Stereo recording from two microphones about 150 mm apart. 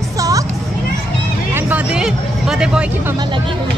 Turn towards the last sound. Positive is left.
turn(degrees=-5)  # may be behind; listen again after turning